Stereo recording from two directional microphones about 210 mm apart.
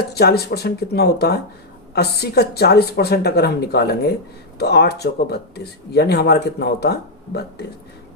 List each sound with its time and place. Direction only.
0.1 s speech: 50° left (ahead or behind)